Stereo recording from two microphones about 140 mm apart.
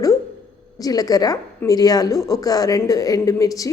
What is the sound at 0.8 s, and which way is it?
A woman's voice, 25° left (ahead or behind).